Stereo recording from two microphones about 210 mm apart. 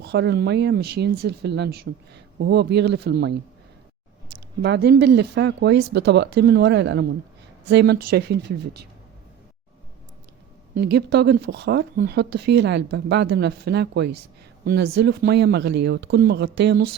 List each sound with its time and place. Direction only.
0.0 s speech: 50° right (ahead or behind)
4.6 s speech: 50° right (ahead or behind)
10.8 s speech: 50° right (ahead or behind)